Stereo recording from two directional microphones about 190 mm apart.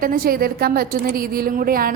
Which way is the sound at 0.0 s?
50° right (ahead or behind).